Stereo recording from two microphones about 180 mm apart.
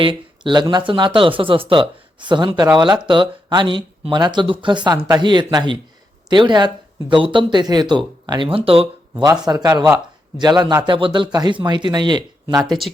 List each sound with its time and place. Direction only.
0.0 s speech: 25° right (ahead or behind)